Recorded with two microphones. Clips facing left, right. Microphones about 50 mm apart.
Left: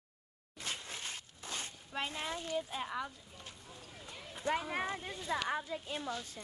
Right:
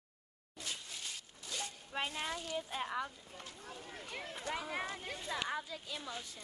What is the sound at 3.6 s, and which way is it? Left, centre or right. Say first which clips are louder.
Speech: right 4 dB; right.